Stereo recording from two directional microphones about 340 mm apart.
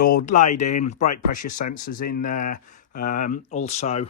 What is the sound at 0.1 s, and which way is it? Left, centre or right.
Speech, left.